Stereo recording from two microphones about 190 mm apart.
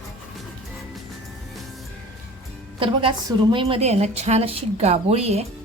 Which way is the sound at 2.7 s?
25° right (ahead or behind).